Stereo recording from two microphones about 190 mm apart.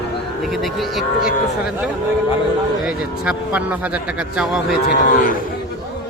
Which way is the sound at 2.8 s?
5° right (ahead or behind).